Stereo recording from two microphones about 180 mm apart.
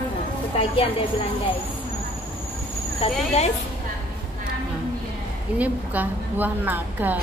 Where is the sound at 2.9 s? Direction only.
35° left (ahead or behind).